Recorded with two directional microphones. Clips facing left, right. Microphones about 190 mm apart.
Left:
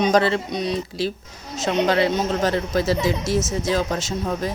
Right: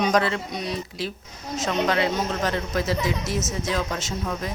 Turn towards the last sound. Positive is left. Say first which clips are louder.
# left 4 dB
turn(degrees=35)  # may be behind; listen again after turning